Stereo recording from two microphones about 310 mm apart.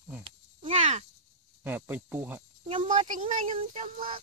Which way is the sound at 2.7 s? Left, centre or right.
Right.